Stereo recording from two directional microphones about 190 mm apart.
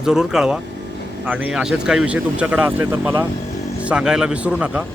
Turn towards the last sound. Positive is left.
turn(degrees=-5)  # may be behind; listen again after turning